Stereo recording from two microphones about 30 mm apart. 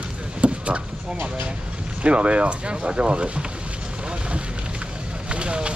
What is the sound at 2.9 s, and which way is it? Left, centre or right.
Speech, right.